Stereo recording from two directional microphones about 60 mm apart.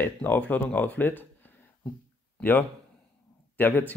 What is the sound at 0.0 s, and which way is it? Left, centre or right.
Speech, left.